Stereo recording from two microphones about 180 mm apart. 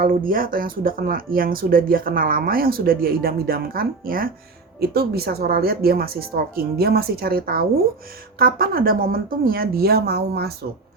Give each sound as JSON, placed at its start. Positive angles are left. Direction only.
{"t": 0.0, "sound": "speech", "side_deg": -50}